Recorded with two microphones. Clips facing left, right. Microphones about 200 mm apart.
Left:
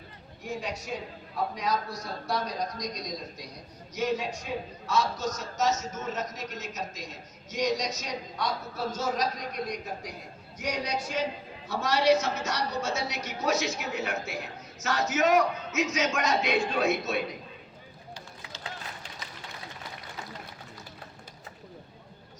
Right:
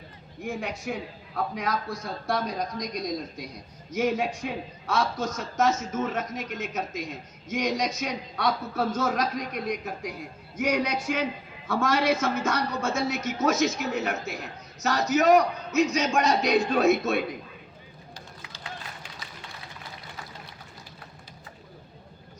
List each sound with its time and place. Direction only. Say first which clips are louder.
0.4 s a woman's voice: right 3 dB; 50° right (ahead or behind)